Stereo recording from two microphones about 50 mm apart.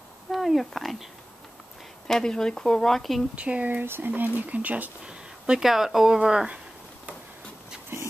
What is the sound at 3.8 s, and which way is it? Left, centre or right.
Speech, right.